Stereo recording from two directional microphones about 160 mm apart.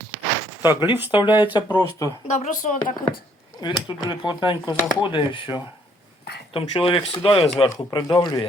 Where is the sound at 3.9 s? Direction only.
30° left (ahead or behind).